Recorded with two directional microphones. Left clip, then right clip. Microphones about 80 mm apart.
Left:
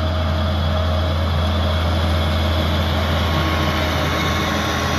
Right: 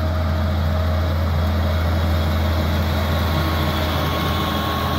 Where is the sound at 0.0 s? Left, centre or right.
Right.